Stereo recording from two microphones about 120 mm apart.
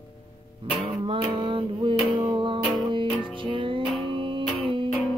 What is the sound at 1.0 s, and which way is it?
Music, 45° right (ahead or behind).